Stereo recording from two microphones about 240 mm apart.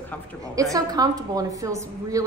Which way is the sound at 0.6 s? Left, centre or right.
Centre.